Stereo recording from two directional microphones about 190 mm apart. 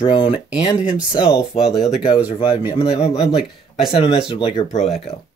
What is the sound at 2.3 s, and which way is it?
Speech, 25° left (ahead or behind).